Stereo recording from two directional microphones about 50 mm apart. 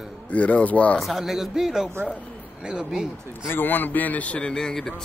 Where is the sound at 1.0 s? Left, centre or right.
Centre.